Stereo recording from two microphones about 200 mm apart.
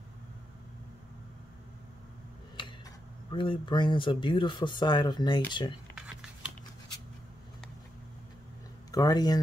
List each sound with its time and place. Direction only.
2.6 s tick-tock: 25° left (ahead or behind)
3.3 s speech: 25° left (ahead or behind)
8.9 s speech: 20° left (ahead or behind)